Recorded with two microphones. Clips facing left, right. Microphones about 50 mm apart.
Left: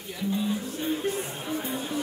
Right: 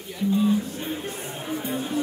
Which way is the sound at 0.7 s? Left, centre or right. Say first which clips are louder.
Left 3 dB; centre.